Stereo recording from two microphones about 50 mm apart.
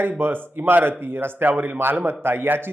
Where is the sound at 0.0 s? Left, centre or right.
Right.